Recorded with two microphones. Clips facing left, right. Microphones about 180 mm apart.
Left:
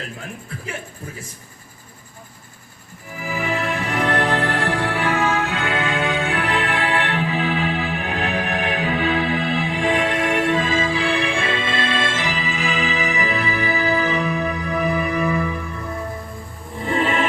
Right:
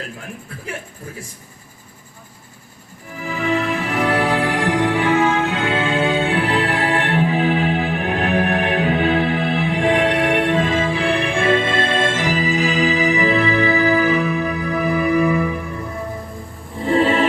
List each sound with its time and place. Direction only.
3.2 s music: 5° left (ahead or behind); by 15.4 s 10° right (ahead or behind)
16.8 s music: 30° right (ahead or behind)